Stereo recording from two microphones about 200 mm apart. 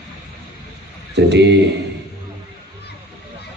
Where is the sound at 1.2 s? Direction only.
60° right (ahead or behind).